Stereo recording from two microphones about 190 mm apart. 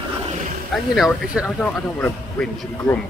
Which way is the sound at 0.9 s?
Centre (ahead or behind).